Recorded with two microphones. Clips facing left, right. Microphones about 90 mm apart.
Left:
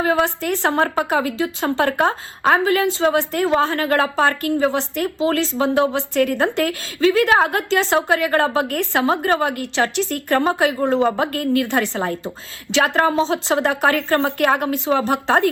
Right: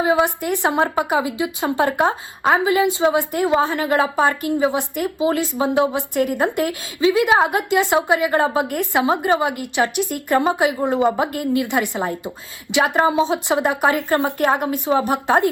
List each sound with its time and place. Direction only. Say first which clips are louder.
0.0 s speech: right 1 dB; 15° right (ahead or behind)
14.3 s speech: left 1 dB; 55° left (ahead or behind)
14.6 s speech: even; 15° right (ahead or behind)